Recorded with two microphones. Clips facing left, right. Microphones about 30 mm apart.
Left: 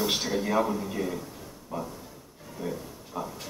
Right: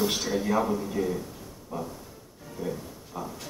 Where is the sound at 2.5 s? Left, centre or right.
Centre.